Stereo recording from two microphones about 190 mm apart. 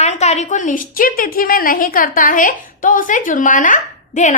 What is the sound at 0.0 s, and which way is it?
A woman's voice, 35° left (ahead or behind).